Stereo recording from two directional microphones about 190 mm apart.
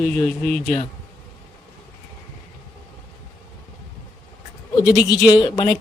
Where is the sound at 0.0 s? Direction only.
5° left (ahead or behind).